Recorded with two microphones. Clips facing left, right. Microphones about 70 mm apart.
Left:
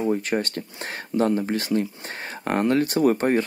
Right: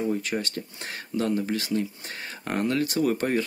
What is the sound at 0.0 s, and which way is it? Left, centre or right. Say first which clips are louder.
Speech: left 4 dB; left.